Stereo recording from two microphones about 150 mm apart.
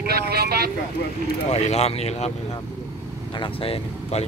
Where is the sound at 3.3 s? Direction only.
35° left (ahead or behind).